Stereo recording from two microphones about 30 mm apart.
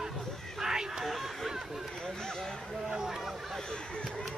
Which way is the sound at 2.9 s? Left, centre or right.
Centre.